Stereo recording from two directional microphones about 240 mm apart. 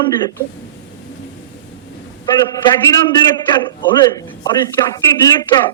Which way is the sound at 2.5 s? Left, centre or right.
Centre.